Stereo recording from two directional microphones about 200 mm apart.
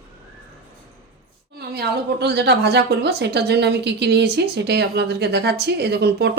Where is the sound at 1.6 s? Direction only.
55° right (ahead or behind).